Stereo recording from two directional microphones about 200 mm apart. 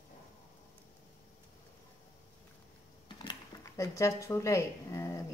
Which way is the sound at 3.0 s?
20° left (ahead or behind).